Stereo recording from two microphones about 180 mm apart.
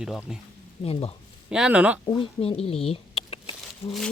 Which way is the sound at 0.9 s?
30° left (ahead or behind).